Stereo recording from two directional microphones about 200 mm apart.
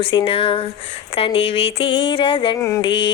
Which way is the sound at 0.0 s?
25° left (ahead or behind).